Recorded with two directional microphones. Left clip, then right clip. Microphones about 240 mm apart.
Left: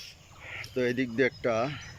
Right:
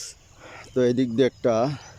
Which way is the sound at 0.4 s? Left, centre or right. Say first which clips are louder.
Right 7 dB; centre.